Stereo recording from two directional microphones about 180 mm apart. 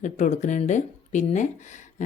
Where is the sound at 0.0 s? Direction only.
40° left (ahead or behind).